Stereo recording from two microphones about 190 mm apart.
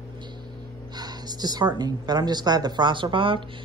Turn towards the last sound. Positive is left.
turn(degrees=-25)  # may be behind; listen again after turning